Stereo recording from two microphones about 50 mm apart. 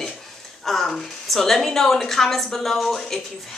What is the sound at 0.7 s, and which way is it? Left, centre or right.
A woman's voice, centre.